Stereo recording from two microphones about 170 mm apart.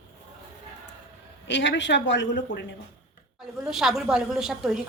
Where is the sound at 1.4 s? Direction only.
90° left.